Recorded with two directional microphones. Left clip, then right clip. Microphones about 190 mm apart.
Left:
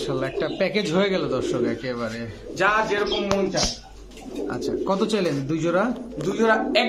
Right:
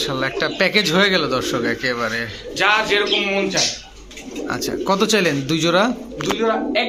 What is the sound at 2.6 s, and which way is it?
Speech, 45° left (ahead or behind).